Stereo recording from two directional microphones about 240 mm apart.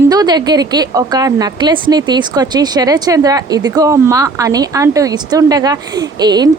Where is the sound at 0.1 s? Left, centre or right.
Centre.